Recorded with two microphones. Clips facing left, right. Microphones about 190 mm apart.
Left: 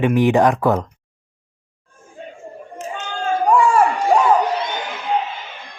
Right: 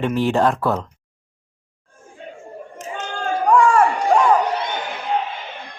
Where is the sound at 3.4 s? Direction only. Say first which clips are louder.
Even; 10° left (ahead or behind).